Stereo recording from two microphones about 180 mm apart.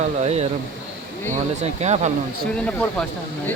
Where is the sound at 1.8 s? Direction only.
40° right (ahead or behind).